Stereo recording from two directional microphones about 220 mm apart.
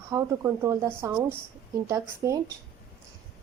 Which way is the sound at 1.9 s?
15° right (ahead or behind).